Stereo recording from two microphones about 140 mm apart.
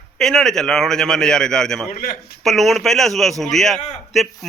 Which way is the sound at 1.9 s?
90° left.